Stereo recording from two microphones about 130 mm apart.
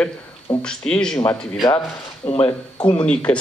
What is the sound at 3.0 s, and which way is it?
Speech, 10° left (ahead or behind).